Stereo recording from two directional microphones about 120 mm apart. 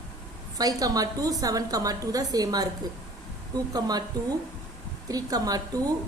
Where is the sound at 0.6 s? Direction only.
30° right (ahead or behind).